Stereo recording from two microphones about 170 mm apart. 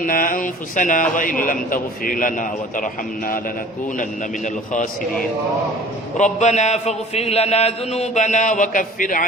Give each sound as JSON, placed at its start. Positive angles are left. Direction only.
{"t": 0.0, "sound": "a man's voice", "side_deg": 55}
{"t": 6.1, "sound": "a man's voice", "side_deg": 45}